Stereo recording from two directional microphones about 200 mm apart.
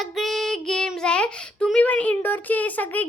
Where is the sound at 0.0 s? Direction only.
Centre (ahead or behind).